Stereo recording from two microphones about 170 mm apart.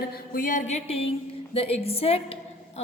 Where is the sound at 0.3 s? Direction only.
50° left (ahead or behind).